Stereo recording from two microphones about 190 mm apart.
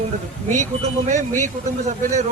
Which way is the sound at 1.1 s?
40° right (ahead or behind).